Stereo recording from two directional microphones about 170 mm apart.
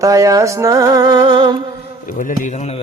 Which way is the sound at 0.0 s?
20° right (ahead or behind).